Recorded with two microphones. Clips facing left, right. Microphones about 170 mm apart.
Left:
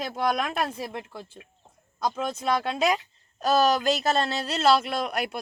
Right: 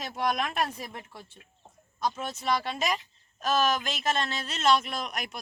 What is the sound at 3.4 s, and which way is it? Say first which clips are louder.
Speech: left 5 dB; 35° left (ahead or behind).